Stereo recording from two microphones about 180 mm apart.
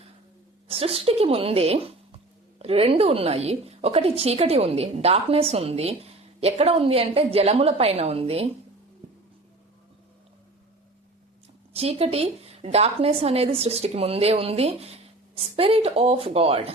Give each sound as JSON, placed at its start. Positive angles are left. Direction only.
{"t": 0.7, "sound": "speech", "side_deg": -35}
{"t": 11.7, "sound": "speech", "side_deg": -35}